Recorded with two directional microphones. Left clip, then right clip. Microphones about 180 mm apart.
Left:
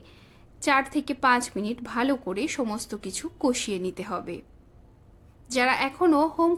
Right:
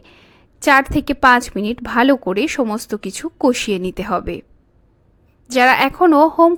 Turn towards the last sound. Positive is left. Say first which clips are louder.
# right 11 dB
turn(degrees=-35)  # may be behind; listen again after turning